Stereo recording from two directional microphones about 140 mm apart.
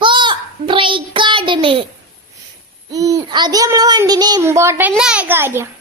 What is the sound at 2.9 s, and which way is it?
A child's voice, 25° right (ahead or behind).